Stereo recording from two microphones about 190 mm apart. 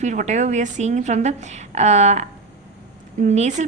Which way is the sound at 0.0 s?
40° right (ahead or behind).